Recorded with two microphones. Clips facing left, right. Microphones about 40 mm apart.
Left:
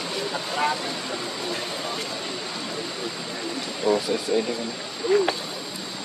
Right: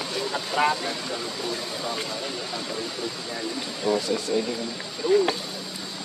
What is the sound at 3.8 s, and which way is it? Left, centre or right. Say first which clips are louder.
Speech: left 2 dB; centre.